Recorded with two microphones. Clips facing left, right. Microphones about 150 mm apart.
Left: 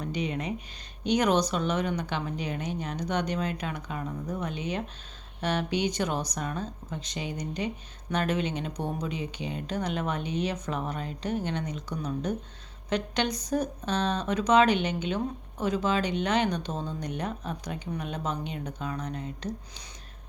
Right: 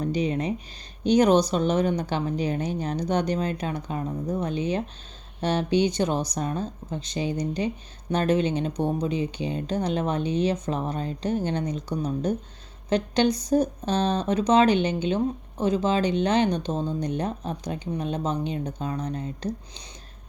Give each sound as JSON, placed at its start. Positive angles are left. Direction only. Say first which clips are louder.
{"t": 0.0, "sound": "speech", "louder": "right 6 dB", "side_deg": -35}